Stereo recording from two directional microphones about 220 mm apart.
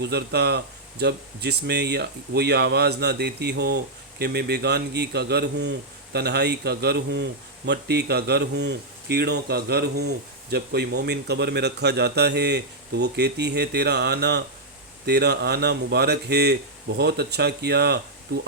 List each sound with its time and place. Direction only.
0.0 s speech: 50° right (ahead or behind)